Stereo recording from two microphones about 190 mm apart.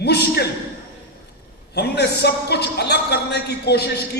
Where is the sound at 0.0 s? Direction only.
60° left (ahead or behind).